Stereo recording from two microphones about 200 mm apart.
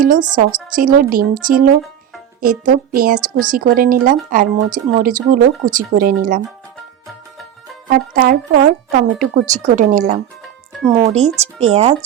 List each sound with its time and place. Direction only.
0.0 s a woman's voice: 40° right (ahead or behind)
7.9 s a woman's voice: 45° right (ahead or behind)